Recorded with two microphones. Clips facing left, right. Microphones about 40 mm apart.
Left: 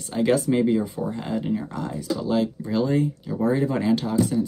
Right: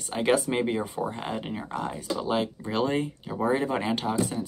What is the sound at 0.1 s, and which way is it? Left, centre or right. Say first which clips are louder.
Speech: left 4 dB; right.